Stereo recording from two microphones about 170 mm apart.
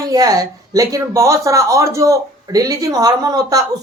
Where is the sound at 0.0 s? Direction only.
20° right (ahead or behind).